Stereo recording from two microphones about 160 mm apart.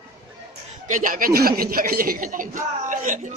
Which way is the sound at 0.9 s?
55° right (ahead or behind).